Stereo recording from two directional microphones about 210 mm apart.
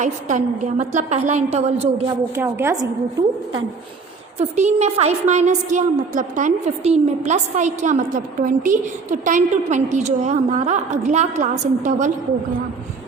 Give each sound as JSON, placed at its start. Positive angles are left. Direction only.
{"t": 0.0, "sound": "a woman's voice", "side_deg": -35}
{"t": 2.3, "sound": "a woman's voice", "side_deg": -10}
{"t": 4.4, "sound": "a woman's voice", "side_deg": -30}